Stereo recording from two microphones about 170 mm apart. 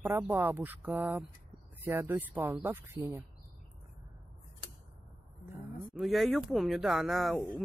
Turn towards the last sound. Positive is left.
turn(degrees=0)  # may be behind; listen again after turning